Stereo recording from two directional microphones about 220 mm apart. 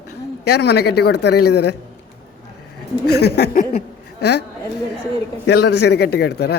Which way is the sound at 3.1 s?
45° left (ahead or behind).